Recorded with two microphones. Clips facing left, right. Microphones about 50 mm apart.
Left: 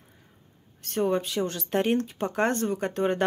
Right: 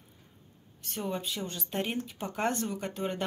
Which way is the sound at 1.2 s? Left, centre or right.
Left.